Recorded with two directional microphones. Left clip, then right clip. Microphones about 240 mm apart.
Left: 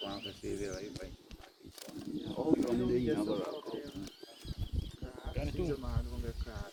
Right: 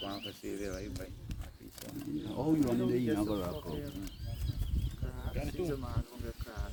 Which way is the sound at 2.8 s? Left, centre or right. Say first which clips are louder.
Even; right.